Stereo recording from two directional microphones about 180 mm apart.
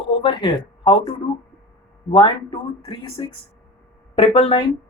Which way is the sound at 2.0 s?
30° left (ahead or behind).